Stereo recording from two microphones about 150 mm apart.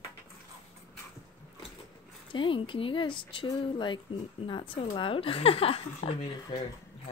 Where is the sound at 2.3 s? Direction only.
35° left (ahead or behind).